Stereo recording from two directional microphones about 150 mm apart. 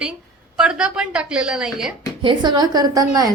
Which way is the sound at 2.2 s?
30° right (ahead or behind).